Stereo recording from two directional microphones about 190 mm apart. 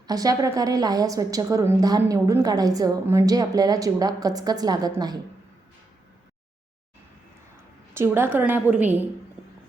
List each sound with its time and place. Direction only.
0.1 s a woman's voice: 20° right (ahead or behind)
7.9 s a woman's voice: 15° right (ahead or behind)